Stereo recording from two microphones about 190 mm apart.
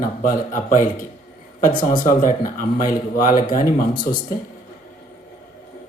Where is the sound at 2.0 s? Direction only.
45° left (ahead or behind).